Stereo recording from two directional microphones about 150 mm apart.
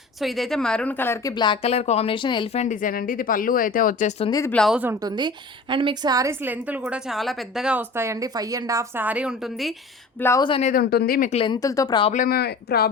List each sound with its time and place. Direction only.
0.2 s a woman's voice: centre (ahead or behind); by 1.3 s 15° left (ahead or behind)
1.3 s speech: 30° left (ahead or behind)
2.5 s speech: 50° left (ahead or behind)
4.3 s speech: 20° left (ahead or behind)
4.5 s a woman's voice: centre (ahead or behind)
4.9 s a woman's voice: 30° right (ahead or behind)
9.0 s a woman's voice: 5° right (ahead or behind)
10.2 s speech: 15° left (ahead or behind)
10.6 s speech: 65° left (ahead or behind)
11.4 s speech: 25° left (ahead or behind)
12.1 s speech: 75° left (ahead or behind)